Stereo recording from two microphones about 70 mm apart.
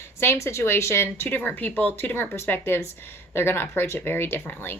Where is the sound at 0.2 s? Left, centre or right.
Left.